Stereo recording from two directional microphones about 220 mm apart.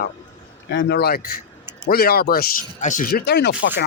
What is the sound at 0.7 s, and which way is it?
A man's voice, 50° left (ahead or behind).